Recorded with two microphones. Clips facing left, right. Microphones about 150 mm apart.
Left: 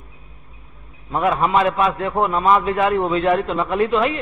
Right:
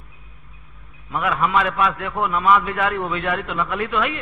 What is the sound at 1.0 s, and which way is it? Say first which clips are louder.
A man's voice: left 3 dB; 30° left (ahead or behind).